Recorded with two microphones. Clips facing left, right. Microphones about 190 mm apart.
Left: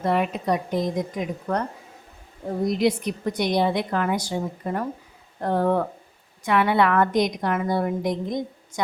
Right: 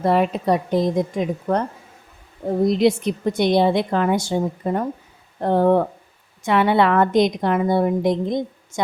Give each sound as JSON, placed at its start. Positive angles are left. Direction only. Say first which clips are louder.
{"t": 0.0, "sound": "a woman's voice", "louder": "right 5 dB", "side_deg": -35}
{"t": 2.6, "sound": "a woman's voice", "louder": "right 4 dB", "side_deg": -25}